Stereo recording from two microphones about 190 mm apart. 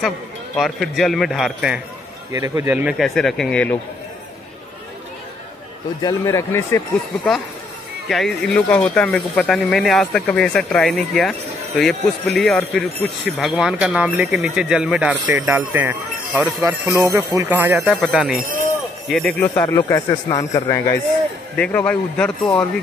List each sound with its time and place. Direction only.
0.6 s speech: centre (ahead or behind)
2.3 s speech: 15° right (ahead or behind); by 3.7 s 5° left (ahead or behind)
6.0 s a man's voice: 15° left (ahead or behind)
8.1 s speech: centre (ahead or behind)
17.7 s speech: centre (ahead or behind)
19.5 s a man's voice: 20° left (ahead or behind)